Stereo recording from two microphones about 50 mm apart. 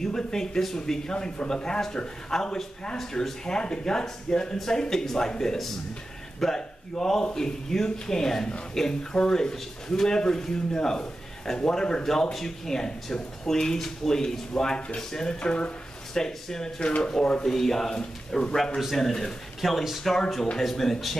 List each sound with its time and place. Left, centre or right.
0.0 s speech: centre
17.5 s speech: centre
19.6 s speech: centre